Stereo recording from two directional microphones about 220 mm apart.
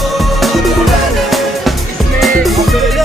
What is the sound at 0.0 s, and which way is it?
Music, centre (ahead or behind).